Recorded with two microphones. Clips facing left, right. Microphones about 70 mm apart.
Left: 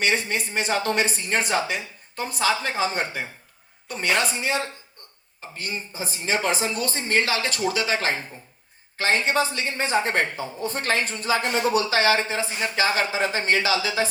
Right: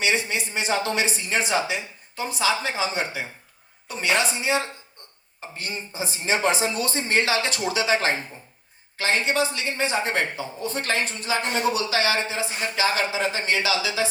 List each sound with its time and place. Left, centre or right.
0.0 s a woman's voice: left
5.9 s speech: left
6.1 s speech: right
9.0 s speech: left